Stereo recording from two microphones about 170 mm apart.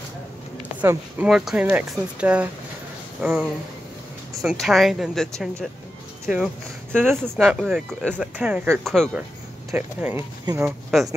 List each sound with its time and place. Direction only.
0.7 s speech: 10° right (ahead or behind)
10.9 s speech: centre (ahead or behind)